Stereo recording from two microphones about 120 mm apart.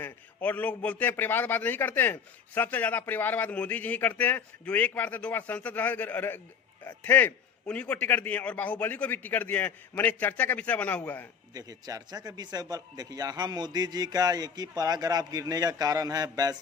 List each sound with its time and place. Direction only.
0.0 s a man's voice: 15° left (ahead or behind)
11.5 s a man's voice: 30° right (ahead or behind)